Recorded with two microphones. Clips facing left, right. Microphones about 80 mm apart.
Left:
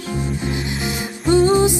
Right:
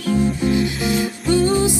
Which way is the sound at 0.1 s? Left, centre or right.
Left.